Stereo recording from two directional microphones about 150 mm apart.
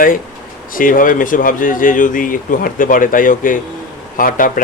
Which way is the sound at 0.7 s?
65° left (ahead or behind).